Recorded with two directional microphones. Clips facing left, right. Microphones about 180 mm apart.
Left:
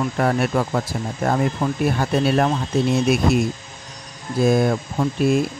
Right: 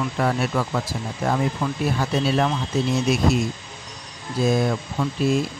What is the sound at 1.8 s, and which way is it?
Speech, 55° left (ahead or behind).